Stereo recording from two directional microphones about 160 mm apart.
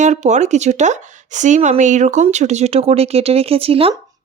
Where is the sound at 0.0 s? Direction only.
45° right (ahead or behind).